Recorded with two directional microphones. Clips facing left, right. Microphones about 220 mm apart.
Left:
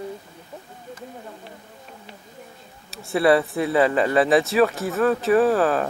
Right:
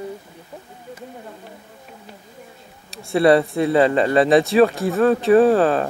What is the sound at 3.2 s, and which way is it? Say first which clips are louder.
A man's voice: right 3 dB; 30° right (ahead or behind).